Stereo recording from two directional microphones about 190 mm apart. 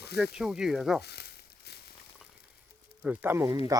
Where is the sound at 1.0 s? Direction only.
60° left (ahead or behind).